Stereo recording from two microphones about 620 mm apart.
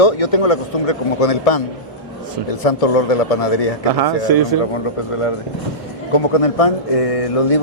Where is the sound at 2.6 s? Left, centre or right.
Left.